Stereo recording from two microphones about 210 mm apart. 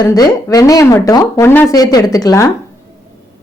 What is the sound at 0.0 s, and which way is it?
Speech, 15° left (ahead or behind).